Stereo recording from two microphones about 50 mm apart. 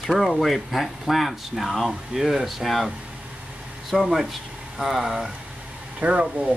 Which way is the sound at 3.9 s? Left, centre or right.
Centre.